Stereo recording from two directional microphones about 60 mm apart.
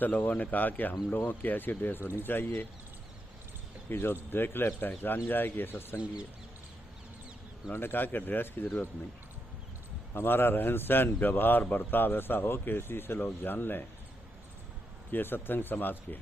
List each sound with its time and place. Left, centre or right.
0.0 s a man's voice: left
3.8 s a man's voice: left
7.7 s a man's voice: left
10.2 s a man's voice: left
15.1 s a man's voice: left